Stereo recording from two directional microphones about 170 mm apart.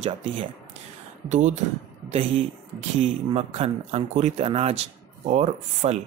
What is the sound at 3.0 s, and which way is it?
Speech, 35° right (ahead or behind).